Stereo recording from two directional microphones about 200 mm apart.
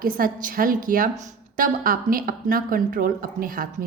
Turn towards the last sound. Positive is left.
turn(degrees=-45)  # may be behind; listen again after turning